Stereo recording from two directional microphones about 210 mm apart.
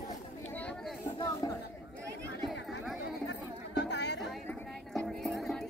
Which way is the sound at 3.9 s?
55° left (ahead or behind).